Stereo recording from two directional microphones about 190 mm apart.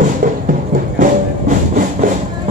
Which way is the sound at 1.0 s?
45° right (ahead or behind).